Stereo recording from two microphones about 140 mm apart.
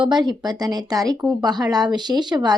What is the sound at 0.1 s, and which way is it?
A woman's voice, 30° right (ahead or behind).